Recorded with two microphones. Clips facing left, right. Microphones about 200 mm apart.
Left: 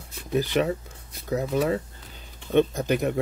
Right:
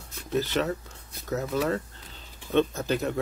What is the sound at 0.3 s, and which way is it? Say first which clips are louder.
Speech: left 3 dB; 15° left (ahead or behind).